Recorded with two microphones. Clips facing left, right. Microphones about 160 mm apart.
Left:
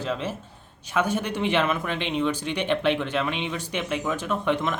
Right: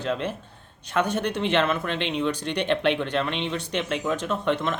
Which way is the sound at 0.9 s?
10° left (ahead or behind).